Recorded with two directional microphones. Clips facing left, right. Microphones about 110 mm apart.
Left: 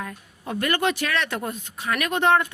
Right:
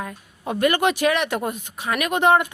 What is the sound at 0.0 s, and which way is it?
A woman's voice, 15° right (ahead or behind).